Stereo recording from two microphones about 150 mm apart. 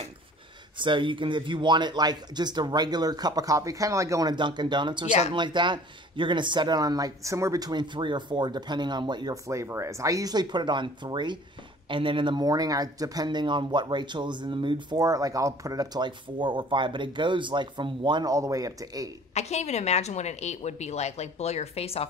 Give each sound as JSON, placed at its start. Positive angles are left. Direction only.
{"t": 0.7, "sound": "speech", "side_deg": -35}
{"t": 19.3, "sound": "a woman's voice", "side_deg": 50}